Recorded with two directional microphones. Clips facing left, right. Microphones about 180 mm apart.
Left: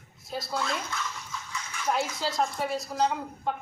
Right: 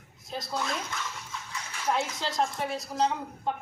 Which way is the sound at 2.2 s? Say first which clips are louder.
Left 1 dB; centre (ahead or behind).